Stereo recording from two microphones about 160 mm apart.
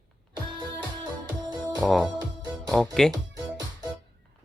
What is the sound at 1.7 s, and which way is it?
Speech, centre (ahead or behind).